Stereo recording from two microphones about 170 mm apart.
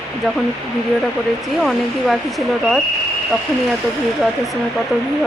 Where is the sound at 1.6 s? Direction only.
Centre (ahead or behind).